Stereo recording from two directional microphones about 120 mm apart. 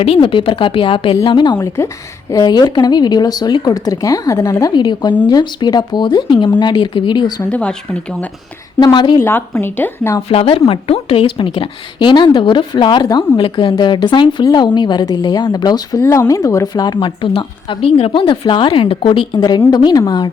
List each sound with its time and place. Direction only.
0.0 s a woman's voice: 50° left (ahead or behind)
7.5 s speech: 10° left (ahead or behind)
8.8 s speech: 40° left (ahead or behind)
9.2 s a woman's voice: 20° left (ahead or behind)
10.2 s a woman's voice: 55° left (ahead or behind); by 16.0 s 35° left (ahead or behind)
16.0 s speech: 25° left (ahead or behind)